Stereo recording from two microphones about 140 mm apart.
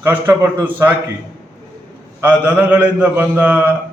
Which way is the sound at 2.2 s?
10° right (ahead or behind).